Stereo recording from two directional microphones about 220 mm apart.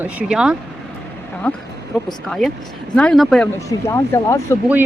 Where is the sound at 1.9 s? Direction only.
Centre (ahead or behind).